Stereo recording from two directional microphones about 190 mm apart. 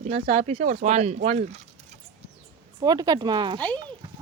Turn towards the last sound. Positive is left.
turn(degrees=-20)  # may be behind; listen again after turning